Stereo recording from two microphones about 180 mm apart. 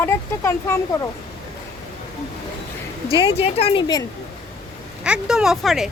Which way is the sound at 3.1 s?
30° left (ahead or behind).